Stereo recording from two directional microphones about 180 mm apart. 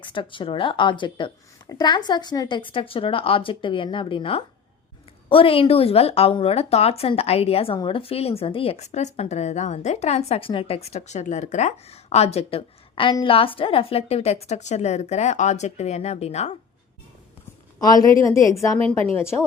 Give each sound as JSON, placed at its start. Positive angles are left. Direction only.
{"t": 0.0, "sound": "speech", "side_deg": 25}
{"t": 17.7, "sound": "a woman's voice", "side_deg": 20}